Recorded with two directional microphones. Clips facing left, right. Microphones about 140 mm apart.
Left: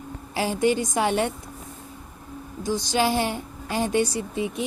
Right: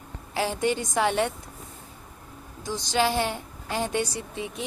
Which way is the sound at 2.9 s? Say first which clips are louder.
Even; 15° left (ahead or behind).